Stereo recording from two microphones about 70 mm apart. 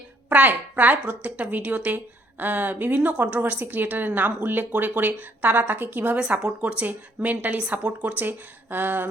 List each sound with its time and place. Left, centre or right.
0.3 s a woman's voice: right